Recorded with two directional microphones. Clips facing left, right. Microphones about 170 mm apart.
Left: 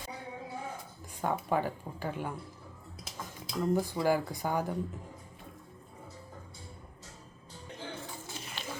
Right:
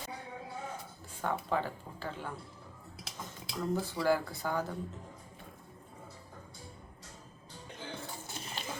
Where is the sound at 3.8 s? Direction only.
15° left (ahead or behind).